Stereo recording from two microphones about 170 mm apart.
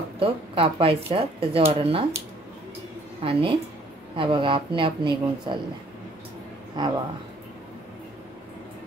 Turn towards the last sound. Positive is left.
turn(degrees=-25)  # may be behind; listen again after turning